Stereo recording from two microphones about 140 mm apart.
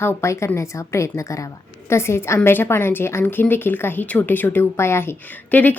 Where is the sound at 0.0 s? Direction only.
20° left (ahead or behind).